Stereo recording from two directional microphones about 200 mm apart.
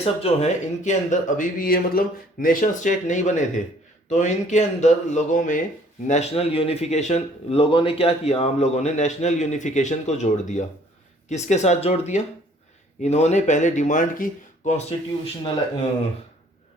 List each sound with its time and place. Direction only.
0.0 s speech: 30° left (ahead or behind)